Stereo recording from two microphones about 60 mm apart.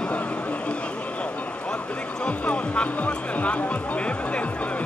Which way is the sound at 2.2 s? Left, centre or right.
Centre.